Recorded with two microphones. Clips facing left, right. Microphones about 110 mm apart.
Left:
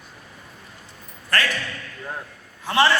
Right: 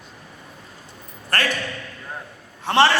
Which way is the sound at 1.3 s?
50° right (ahead or behind).